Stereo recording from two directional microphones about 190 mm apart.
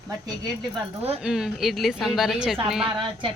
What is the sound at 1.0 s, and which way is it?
A woman's voice, 5° right (ahead or behind).